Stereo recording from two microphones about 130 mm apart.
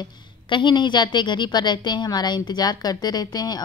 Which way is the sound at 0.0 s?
35° left (ahead or behind).